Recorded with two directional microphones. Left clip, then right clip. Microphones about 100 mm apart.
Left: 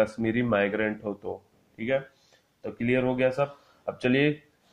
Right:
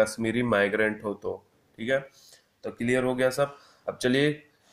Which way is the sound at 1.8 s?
Centre (ahead or behind).